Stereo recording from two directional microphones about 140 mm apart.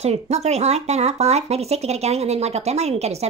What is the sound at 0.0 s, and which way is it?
Speech, 50° right (ahead or behind).